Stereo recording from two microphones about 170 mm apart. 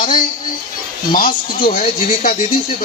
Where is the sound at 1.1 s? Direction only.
55° left (ahead or behind).